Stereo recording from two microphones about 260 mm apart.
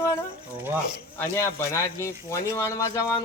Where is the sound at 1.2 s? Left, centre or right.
Centre.